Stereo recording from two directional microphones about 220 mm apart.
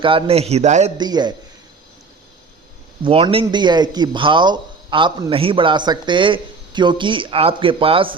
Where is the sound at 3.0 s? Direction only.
25° right (ahead or behind).